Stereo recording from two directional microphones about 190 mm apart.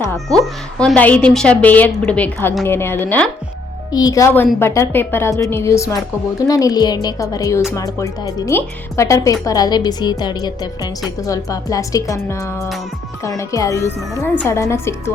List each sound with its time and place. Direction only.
0.8 s a woman's voice: 5° left (ahead or behind)